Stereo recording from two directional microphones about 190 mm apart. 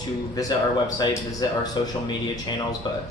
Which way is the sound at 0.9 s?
20° left (ahead or behind).